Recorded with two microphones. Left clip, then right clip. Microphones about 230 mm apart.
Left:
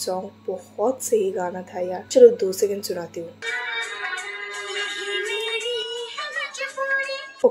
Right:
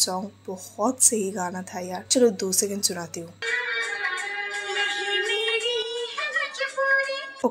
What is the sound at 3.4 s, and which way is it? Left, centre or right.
Music, centre.